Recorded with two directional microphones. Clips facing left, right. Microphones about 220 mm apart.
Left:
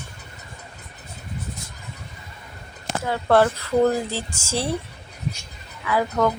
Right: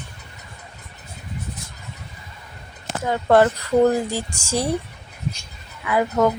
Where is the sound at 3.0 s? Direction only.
15° right (ahead or behind).